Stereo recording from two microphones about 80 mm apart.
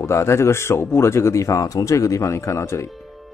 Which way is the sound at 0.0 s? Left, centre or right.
Left.